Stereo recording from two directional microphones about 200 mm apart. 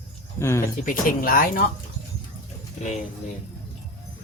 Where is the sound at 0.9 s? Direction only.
45° left (ahead or behind).